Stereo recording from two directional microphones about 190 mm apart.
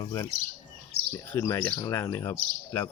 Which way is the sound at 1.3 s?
10° left (ahead or behind).